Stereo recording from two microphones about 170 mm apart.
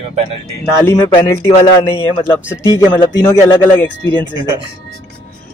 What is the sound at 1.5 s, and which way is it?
Speech, 35° left (ahead or behind).